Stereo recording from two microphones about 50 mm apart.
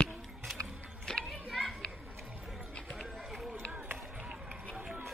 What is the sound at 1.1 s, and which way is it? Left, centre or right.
Children playing, centre.